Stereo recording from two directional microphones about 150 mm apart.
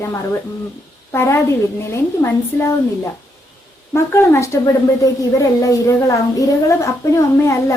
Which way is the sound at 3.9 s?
15° left (ahead or behind).